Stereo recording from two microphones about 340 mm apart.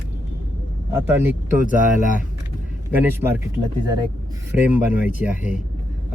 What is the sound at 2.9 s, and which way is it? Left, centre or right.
Speech, centre.